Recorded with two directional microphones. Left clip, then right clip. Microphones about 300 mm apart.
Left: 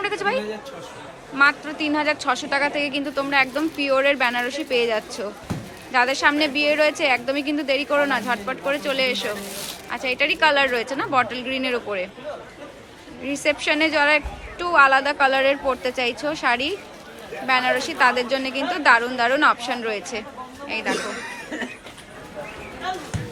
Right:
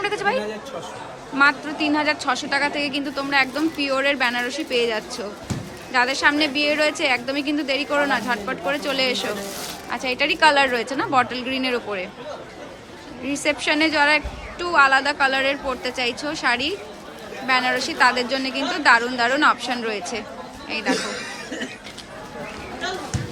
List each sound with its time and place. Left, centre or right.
0.0 s a sound: centre
1.4 s a woman's voice: centre
13.2 s a woman's voice: centre